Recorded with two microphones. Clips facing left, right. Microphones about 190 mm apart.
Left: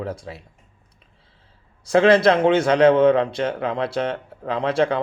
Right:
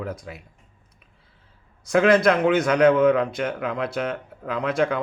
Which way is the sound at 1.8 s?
30° left (ahead or behind).